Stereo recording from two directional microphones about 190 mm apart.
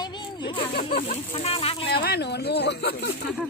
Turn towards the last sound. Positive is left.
turn(degrees=60)  # may be behind; listen again after turning